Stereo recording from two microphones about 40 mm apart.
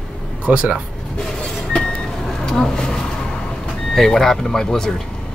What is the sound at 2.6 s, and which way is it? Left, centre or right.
Vehicle, centre.